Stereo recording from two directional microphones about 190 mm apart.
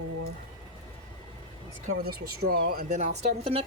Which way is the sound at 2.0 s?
55° right (ahead or behind).